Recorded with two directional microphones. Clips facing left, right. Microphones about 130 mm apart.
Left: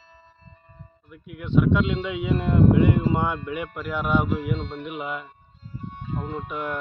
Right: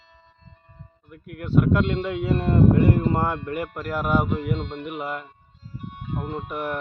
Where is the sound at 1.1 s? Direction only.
50° right (ahead or behind).